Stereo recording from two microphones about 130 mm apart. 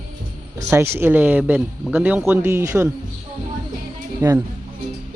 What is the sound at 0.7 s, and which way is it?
Speech, 20° right (ahead or behind).